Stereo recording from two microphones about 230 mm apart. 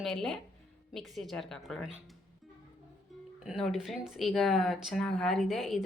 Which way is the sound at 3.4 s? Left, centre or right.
Centre.